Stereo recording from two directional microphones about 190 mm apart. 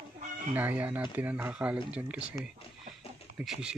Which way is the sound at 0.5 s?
10° right (ahead or behind).